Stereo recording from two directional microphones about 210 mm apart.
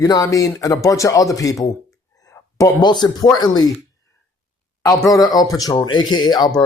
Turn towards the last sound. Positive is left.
turn(degrees=5)  # may be behind; listen again after turning